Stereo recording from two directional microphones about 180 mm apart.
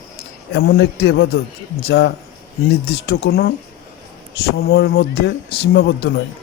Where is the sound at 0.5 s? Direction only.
65° left (ahead or behind).